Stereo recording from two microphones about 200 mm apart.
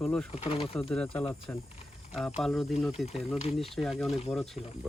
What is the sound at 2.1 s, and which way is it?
Speech, centre (ahead or behind).